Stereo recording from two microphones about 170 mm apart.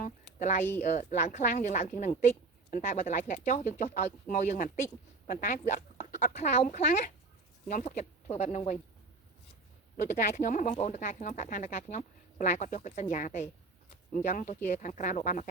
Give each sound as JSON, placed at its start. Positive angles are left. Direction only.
{"t": 0.0, "sound": "a sound", "side_deg": 50}
{"t": 0.8, "sound": "speech", "side_deg": 45}
{"t": 10.0, "sound": "speech", "side_deg": 50}